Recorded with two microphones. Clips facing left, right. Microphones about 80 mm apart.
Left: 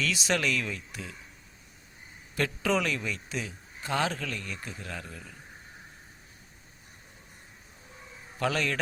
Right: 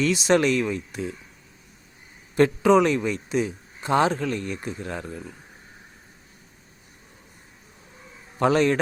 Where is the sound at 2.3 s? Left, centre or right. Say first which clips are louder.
Right 11 dB; right.